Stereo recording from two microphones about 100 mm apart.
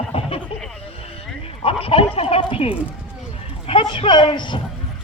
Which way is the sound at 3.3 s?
70° left (ahead or behind).